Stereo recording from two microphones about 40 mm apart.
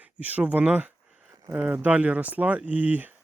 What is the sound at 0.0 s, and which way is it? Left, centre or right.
Speech, right.